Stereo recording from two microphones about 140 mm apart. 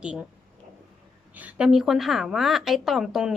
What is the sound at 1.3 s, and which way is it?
A woman's voice, 10° right (ahead or behind).